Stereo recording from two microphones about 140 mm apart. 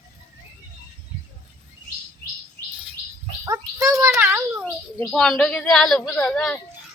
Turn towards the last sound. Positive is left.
turn(degrees=5)  # may be behind; listen again after turning